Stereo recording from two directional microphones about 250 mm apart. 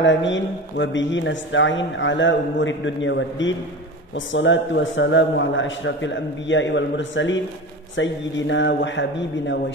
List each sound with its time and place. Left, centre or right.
0.0 s speech: left